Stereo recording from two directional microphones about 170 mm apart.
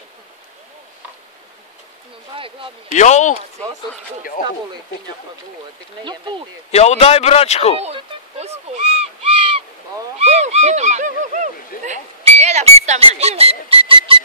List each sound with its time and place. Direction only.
2.3 s speech: 30° right (ahead or behind)
2.9 s speech: 45° left (ahead or behind)
6.7 s a man's voice: 40° left (ahead or behind)
7.8 s owl: 40° right (ahead or behind)
10.1 s a sound: 40° right (ahead or behind)